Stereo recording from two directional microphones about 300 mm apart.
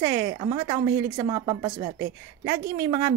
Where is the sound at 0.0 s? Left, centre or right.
Centre.